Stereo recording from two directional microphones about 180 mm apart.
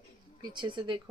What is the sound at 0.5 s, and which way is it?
Speech, 25° right (ahead or behind).